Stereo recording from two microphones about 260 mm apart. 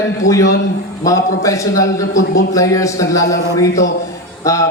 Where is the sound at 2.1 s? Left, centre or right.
Left.